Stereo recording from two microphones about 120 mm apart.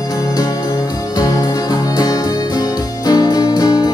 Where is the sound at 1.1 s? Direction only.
30° left (ahead or behind).